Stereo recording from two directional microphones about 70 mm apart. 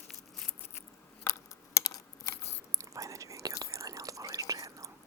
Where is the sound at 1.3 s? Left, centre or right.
Left.